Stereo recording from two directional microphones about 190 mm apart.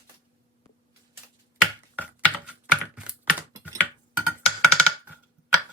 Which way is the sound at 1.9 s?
10° right (ahead or behind).